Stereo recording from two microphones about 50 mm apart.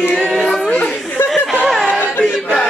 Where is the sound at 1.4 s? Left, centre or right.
Left.